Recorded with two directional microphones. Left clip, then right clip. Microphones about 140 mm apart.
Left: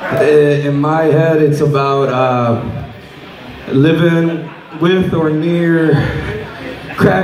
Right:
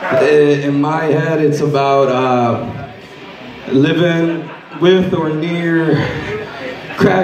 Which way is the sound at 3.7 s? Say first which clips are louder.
Left 1 dB; 55° right (ahead or behind).